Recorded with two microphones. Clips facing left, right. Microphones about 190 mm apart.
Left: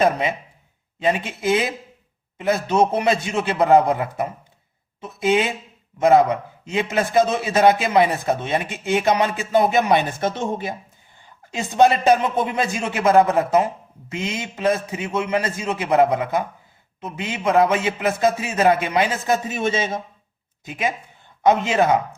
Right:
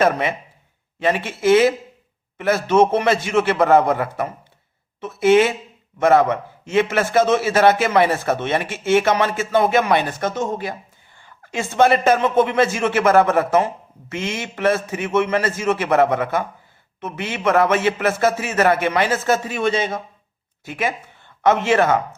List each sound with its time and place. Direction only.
0.0 s speech: 15° left (ahead or behind)
2.9 s a woman's voice: 15° left (ahead or behind)